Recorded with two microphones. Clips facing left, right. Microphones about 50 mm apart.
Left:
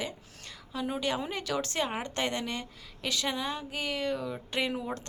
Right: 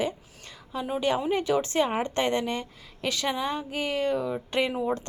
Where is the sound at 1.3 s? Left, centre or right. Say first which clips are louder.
Right 7 dB; right.